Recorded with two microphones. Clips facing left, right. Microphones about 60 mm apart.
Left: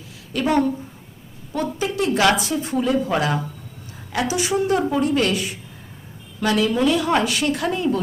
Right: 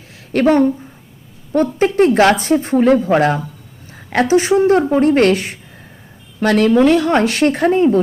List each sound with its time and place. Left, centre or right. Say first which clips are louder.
0.4 s a woman's voice: right 6 dB; right